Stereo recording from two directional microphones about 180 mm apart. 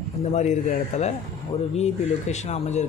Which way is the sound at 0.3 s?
40° left (ahead or behind).